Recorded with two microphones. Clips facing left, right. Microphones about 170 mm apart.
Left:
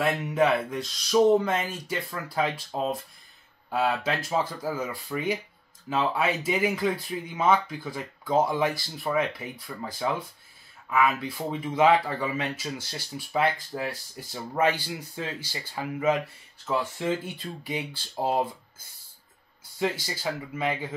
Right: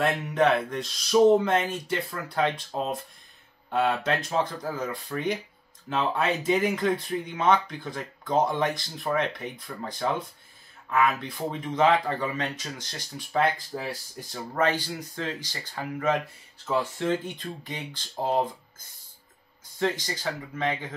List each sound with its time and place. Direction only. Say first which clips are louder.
0.0 s speech: even; 5° left (ahead or behind)
14.3 s speech: even; 10° left (ahead or behind)
19.8 s speech: right 1 dB; 10° left (ahead or behind)